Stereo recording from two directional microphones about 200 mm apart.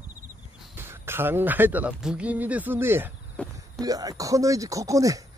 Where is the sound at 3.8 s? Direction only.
20° right (ahead or behind).